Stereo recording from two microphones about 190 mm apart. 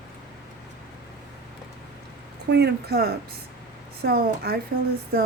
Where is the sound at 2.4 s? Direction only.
60° right (ahead or behind).